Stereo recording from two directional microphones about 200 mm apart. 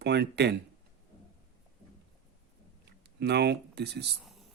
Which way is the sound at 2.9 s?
55° right (ahead or behind).